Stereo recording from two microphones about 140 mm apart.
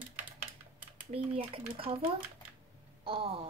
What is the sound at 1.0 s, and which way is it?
Speech, 40° right (ahead or behind).